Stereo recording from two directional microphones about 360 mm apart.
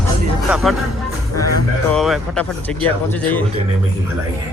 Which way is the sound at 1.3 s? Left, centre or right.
Left.